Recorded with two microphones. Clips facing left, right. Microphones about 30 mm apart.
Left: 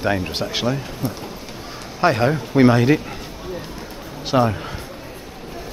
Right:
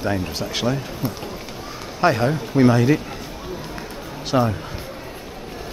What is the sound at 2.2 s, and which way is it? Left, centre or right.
Speech, centre.